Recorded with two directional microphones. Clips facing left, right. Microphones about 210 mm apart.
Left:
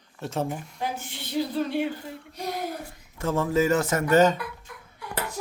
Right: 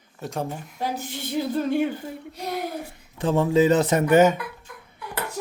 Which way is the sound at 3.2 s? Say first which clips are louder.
Right 4 dB; 15° right (ahead or behind).